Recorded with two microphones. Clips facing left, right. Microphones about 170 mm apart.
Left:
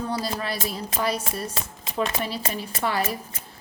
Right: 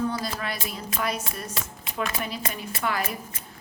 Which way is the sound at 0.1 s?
30° left (ahead or behind).